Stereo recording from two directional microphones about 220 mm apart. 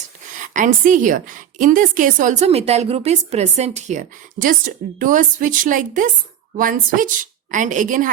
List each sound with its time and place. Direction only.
0.5 s a woman's voice: 35° right (ahead or behind)